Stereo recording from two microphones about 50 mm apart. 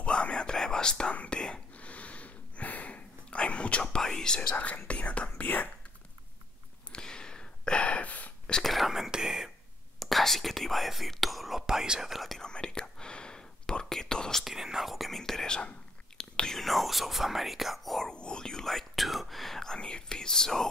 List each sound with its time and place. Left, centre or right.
0.0 s whispering: left
1.4 s a sound: left
4.0 s whispering: centre
4.6 s whispering: left
6.9 s a sound: centre
8.6 s whispering: centre
9.9 s whispering: centre
11.6 s whispering: centre
12.4 s whispering: centre
14.4 s whispering: centre
16.5 s whispering: centre
18.0 s whispering: centre